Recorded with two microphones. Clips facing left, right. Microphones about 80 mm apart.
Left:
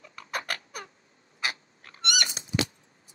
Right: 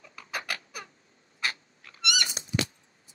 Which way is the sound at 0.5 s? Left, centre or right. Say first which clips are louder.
Left 1 dB; left.